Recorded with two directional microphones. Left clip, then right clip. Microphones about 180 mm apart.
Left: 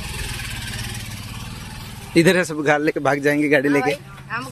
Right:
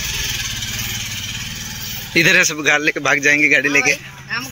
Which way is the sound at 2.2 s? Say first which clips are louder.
Right 4 dB; 20° left (ahead or behind).